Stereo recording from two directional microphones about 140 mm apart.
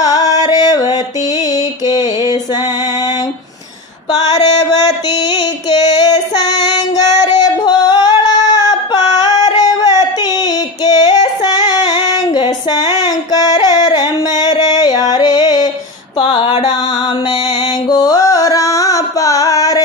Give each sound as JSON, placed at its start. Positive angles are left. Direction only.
{"t": 0.0, "sound": "music", "side_deg": 25}
{"t": 1.5, "sound": "a sound", "side_deg": 30}
{"t": 4.3, "sound": "music", "side_deg": 30}
{"t": 11.4, "sound": "female singing", "side_deg": 30}
{"t": 16.2, "sound": "a sound", "side_deg": 40}
{"t": 17.8, "sound": "carnatic music", "side_deg": 30}